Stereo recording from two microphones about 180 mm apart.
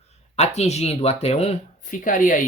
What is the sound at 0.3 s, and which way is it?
Speech, 35° left (ahead or behind).